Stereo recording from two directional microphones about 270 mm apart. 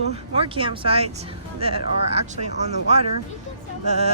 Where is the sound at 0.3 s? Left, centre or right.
Centre.